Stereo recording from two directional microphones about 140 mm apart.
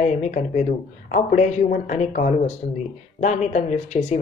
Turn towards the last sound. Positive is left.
turn(degrees=60)  # may be behind; listen again after turning